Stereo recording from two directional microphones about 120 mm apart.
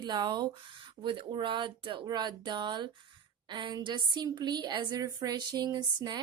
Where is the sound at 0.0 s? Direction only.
40° right (ahead or behind).